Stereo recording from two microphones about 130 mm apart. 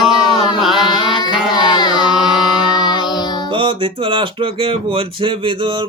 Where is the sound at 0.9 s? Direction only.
35° left (ahead or behind).